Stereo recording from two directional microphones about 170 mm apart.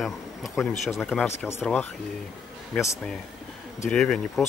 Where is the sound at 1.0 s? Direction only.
10° left (ahead or behind).